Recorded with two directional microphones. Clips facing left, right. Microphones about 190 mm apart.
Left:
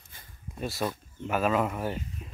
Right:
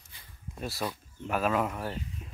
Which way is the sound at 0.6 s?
Centre (ahead or behind).